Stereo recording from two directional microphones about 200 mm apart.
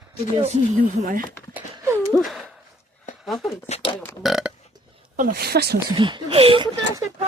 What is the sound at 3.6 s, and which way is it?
Speech, 30° left (ahead or behind).